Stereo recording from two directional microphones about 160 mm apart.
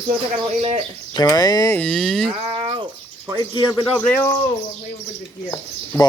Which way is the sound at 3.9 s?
10° left (ahead or behind).